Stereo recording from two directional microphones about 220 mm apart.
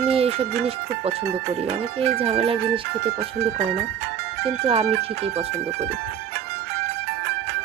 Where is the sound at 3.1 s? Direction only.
45° right (ahead or behind).